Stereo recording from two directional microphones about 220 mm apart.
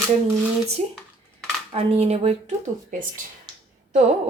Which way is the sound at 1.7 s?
25° right (ahead or behind).